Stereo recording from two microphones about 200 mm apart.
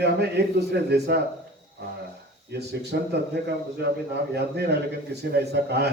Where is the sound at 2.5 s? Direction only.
55° right (ahead or behind).